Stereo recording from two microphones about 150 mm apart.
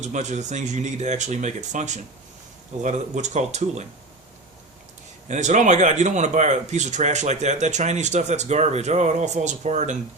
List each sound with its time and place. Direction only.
0.0 s speech: 50° right (ahead or behind)
5.3 s speech: 55° right (ahead or behind)